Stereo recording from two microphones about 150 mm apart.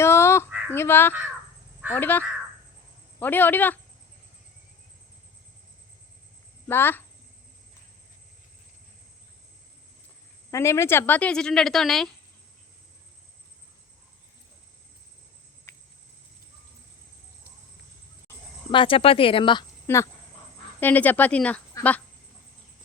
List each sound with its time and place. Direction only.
0.0 s a sound: 15° left (ahead or behind)
0.7 s a woman's voice: 15° left (ahead or behind)
6.7 s a woman's voice: 15° left (ahead or behind)
10.5 s a woman's voice: 20° left (ahead or behind); by 12.1 s centre (ahead or behind)
18.7 s speech: 35° left (ahead or behind)
19.9 s a woman's voice: 15° left (ahead or behind)